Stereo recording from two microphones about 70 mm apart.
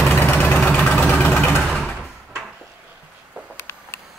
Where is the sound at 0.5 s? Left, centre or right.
Centre.